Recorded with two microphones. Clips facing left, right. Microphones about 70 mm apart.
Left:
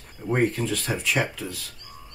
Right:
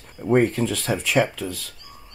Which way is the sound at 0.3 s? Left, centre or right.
Centre.